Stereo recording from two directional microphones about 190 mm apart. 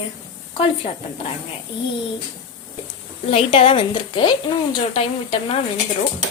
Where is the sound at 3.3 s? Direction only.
30° left (ahead or behind).